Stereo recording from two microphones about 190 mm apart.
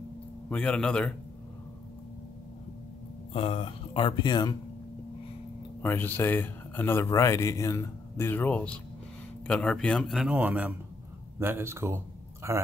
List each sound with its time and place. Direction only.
0.5 s a man's voice: 5° left (ahead or behind)
3.3 s speech: 30° left (ahead or behind)
5.8 s a man's voice: 10° left (ahead or behind); by 12.6 s 15° right (ahead or behind)